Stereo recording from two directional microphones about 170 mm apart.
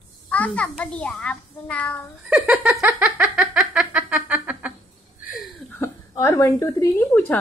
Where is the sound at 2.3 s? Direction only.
5° right (ahead or behind).